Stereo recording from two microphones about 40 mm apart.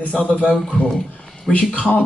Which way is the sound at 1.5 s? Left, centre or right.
Left.